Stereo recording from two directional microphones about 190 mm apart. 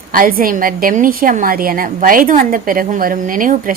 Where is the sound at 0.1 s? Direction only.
50° right (ahead or behind).